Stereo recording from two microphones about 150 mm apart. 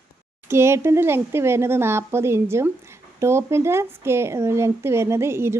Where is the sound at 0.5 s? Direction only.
15° right (ahead or behind).